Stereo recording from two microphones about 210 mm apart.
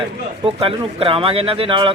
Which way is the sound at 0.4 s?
25° right (ahead or behind).